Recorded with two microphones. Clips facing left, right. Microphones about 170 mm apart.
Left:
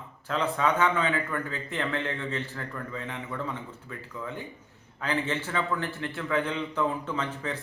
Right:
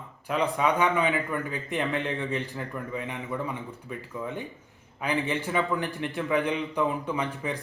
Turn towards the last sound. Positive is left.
turn(degrees=-15)  # may be behind; listen again after turning